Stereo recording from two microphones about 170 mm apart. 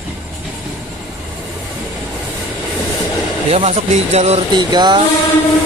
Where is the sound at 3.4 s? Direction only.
35° right (ahead or behind).